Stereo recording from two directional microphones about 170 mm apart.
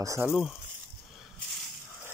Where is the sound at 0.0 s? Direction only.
20° right (ahead or behind).